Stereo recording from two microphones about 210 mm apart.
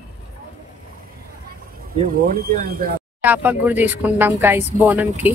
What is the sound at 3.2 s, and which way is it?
Speech, 10° right (ahead or behind).